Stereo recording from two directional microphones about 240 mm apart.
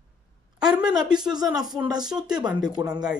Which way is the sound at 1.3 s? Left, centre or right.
Centre.